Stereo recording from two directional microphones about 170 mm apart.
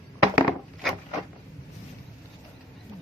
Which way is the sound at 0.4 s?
Centre (ahead or behind).